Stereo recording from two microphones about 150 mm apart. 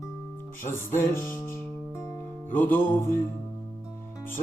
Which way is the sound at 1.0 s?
15° left (ahead or behind).